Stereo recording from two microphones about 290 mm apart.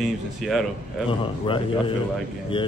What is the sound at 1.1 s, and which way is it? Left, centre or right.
Speech, centre.